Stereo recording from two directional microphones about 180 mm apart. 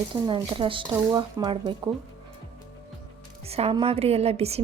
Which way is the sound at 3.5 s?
35° right (ahead or behind).